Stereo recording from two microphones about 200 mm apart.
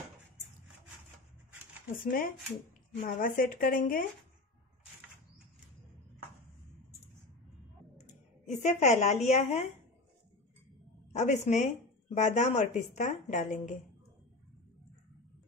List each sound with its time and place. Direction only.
2.0 s speech: 45° left (ahead or behind)
8.5 s speech: 35° left (ahead or behind)
11.1 s speech: 35° left (ahead or behind)